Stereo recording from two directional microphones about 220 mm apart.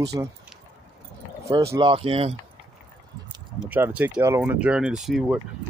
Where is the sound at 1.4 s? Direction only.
15° right (ahead or behind).